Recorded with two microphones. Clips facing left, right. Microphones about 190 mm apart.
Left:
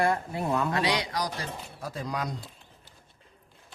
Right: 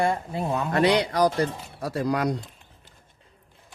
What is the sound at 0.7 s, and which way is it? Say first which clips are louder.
Speech: right 7 dB; 55° right (ahead or behind).